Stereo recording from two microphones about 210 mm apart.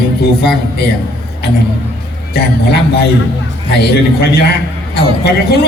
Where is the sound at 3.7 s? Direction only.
50° left (ahead or behind).